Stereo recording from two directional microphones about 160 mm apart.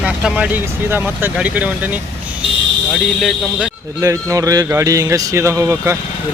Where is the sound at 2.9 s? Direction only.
5° left (ahead or behind).